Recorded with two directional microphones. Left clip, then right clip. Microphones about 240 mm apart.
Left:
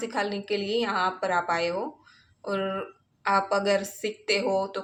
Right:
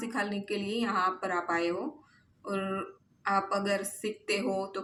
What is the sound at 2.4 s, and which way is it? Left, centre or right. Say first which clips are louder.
A woman's voice: left 5 dB; centre.